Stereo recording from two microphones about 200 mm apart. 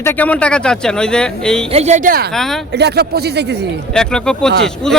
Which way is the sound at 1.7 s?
35° right (ahead or behind).